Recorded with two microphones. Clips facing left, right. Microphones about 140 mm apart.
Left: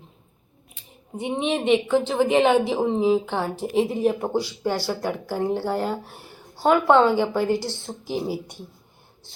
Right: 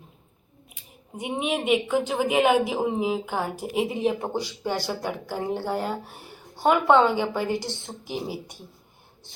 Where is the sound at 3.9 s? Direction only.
Centre (ahead or behind).